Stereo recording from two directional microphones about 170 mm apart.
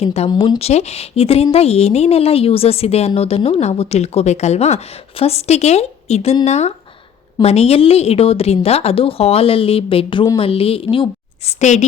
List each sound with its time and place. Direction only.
0.0 s a woman's voice: 40° left (ahead or behind)
0.3 s a woman's voice: 25° left (ahead or behind)
11.6 s a woman's voice: 45° left (ahead or behind)